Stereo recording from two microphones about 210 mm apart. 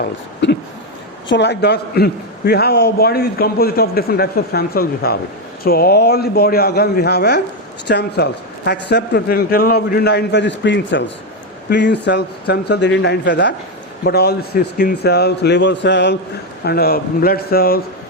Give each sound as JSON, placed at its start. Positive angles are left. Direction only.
{"t": 0.4, "sound": "a man's voice", "side_deg": 60}